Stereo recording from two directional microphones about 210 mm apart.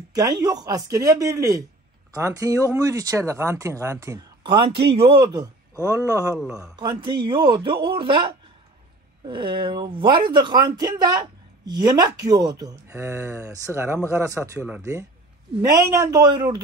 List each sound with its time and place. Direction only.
0.1 s speech: 20° right (ahead or behind)
6.4 s a man's voice: 5° right (ahead or behind)
7.2 s speech: 20° right (ahead or behind)